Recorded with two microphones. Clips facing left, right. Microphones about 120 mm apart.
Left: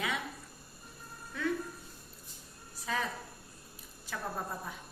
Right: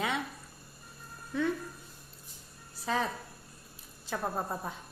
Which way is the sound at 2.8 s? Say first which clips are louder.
Right 4 dB; 30° right (ahead or behind).